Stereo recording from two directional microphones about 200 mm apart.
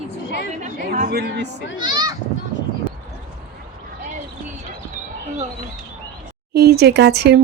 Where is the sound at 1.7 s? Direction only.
20° right (ahead or behind).